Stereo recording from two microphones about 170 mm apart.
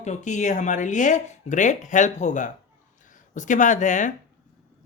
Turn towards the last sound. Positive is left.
turn(degrees=45)  # may be behind; listen again after turning